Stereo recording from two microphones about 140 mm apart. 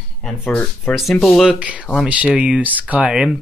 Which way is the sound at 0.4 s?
10° left (ahead or behind).